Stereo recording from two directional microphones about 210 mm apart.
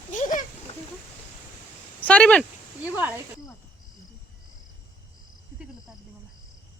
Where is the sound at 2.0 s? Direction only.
5° left (ahead or behind).